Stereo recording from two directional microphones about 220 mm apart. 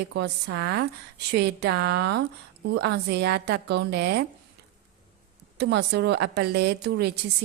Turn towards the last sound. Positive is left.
turn(degrees=-50)  # may be behind; listen again after turning